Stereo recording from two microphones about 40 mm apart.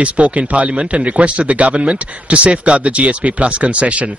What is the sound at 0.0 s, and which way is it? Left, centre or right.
A man's voice, right.